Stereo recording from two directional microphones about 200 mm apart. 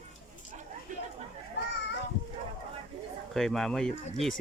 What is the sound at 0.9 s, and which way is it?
Chatter, 40° right (ahead or behind).